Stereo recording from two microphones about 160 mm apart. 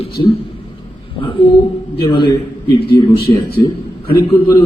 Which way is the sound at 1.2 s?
35° left (ahead or behind).